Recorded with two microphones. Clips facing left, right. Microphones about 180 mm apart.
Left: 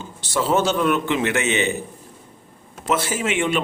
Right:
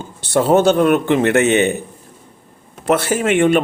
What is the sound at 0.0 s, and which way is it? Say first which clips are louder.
A man's voice: right 7 dB; 60° right (ahead or behind).